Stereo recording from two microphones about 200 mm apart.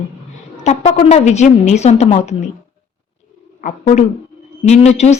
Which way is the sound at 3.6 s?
40° left (ahead or behind).